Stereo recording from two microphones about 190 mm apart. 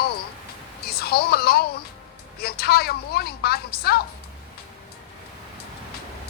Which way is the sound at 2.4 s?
55° left (ahead or behind).